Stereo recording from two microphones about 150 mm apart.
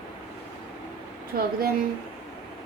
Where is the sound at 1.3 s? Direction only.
70° right (ahead or behind).